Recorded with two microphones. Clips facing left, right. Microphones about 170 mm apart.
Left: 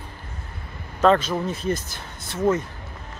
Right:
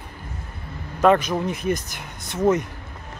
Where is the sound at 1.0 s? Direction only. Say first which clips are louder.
Right 1 dB; 15° right (ahead or behind).